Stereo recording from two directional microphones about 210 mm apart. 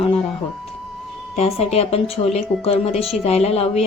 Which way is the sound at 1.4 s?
30° left (ahead or behind).